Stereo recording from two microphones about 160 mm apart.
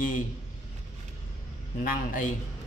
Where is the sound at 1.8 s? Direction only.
60° left (ahead or behind).